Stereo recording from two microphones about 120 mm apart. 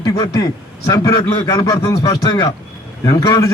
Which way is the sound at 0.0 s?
35° left (ahead or behind).